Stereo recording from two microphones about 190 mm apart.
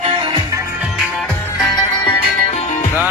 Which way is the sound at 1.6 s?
20° left (ahead or behind).